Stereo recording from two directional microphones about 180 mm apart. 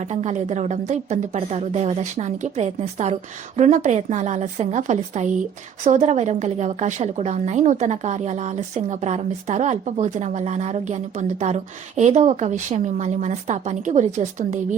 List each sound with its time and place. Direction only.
0.0 s a woman's voice: 40° right (ahead or behind)